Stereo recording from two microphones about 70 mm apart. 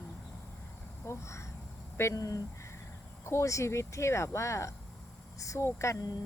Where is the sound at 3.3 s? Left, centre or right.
Left.